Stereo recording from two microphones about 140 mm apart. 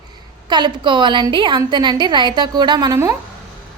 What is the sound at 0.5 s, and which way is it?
A woman's voice, 35° right (ahead or behind).